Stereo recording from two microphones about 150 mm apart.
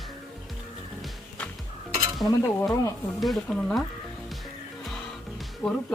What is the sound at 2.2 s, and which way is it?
Dishes, 20° left (ahead or behind).